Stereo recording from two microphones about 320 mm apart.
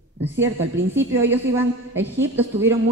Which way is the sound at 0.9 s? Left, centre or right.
Centre.